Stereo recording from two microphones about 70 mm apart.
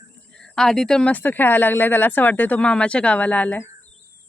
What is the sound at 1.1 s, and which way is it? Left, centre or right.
Speech, left.